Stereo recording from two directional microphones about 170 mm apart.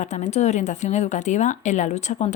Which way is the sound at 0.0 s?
45° left (ahead or behind).